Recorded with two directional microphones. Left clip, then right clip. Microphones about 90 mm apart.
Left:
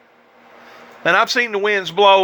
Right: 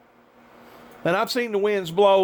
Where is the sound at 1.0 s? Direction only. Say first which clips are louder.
Left 8 dB; 45° right (ahead or behind).